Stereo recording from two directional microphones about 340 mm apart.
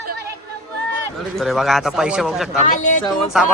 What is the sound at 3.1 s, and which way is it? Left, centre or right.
Speech, centre.